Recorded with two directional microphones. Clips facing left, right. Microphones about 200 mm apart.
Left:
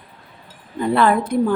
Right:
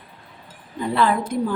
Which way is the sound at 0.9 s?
55° left (ahead or behind).